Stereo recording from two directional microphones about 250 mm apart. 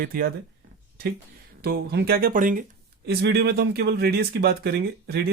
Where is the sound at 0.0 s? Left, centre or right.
Right.